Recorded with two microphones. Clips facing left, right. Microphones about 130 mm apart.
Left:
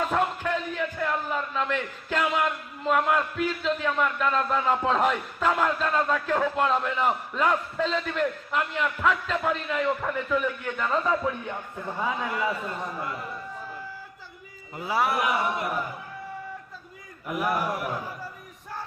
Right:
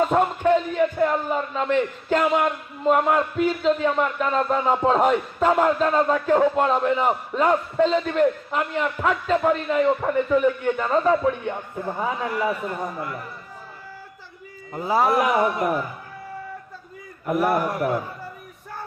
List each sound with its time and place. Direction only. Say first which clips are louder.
0.1 s speech: right 3 dB; 15° right (ahead or behind)
0.4 s a man's voice: right 9 dB; 25° right (ahead or behind)
14.8 s speech: right 6 dB; 40° right (ahead or behind)
17.2 s a man's voice: right 6 dB; 55° right (ahead or behind)